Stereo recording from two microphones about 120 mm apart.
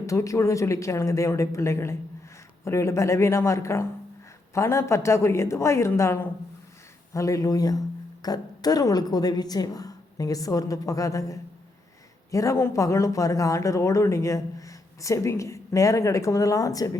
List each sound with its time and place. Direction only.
0.0 s a woman's voice: 25° left (ahead or behind)